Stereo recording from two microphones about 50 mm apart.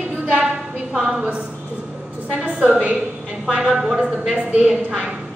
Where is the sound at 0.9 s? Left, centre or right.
Centre.